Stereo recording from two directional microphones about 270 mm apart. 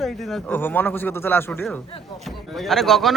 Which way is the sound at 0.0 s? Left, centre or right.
Centre.